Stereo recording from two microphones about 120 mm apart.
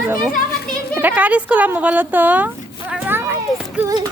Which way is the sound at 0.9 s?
15° right (ahead or behind).